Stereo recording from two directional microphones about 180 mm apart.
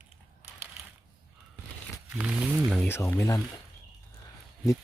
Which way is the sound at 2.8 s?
10° left (ahead or behind).